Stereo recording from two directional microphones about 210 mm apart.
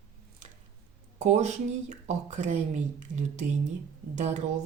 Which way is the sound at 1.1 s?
35° right (ahead or behind).